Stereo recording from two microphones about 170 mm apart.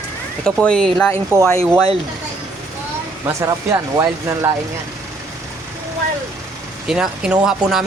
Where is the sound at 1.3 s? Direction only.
15° right (ahead or behind).